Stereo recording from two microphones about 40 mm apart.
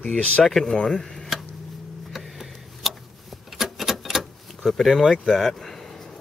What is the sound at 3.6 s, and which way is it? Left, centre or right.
Keys jangling, centre.